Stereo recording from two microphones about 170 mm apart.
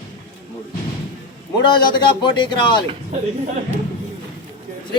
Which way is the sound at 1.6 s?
25° left (ahead or behind).